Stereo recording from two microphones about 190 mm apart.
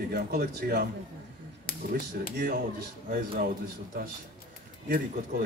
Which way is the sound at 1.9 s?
50° right (ahead or behind).